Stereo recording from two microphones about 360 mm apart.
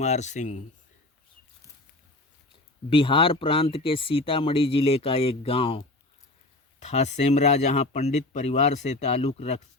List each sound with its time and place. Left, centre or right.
0.0 s speech: centre
2.9 s speech: centre